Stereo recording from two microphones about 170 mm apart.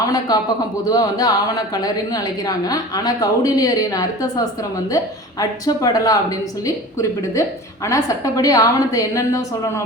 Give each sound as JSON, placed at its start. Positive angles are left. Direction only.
{"t": 0.0, "sound": "a sound", "side_deg": 20}
{"t": 0.9, "sound": "a woman's voice", "side_deg": 20}
{"t": 7.9, "sound": "a woman's voice", "side_deg": 20}